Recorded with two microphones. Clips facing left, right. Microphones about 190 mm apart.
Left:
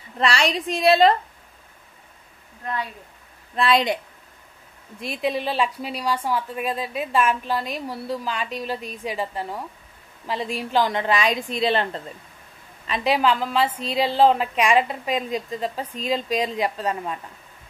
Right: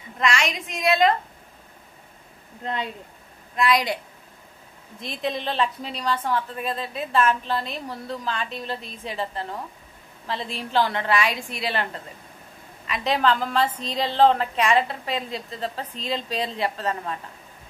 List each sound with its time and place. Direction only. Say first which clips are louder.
0.2 s a woman's voice: left 3 dB; 35° left (ahead or behind)
2.6 s speech: even; 20° right (ahead or behind)
3.5 s a woman's voice: left 2 dB; 30° left (ahead or behind)
5.0 s a woman's voice: left 3 dB; 10° left (ahead or behind); by 12.0 s 25° left (ahead or behind)
13.0 s a woman's voice: left 1 dB; 10° left (ahead or behind)